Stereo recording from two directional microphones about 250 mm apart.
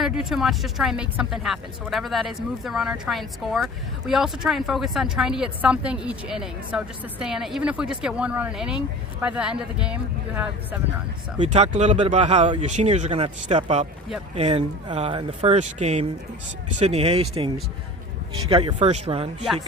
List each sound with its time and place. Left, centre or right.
0.0 s speech: centre
11.3 s speech: right